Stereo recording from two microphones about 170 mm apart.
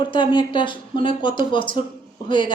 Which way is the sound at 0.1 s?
30° left (ahead or behind).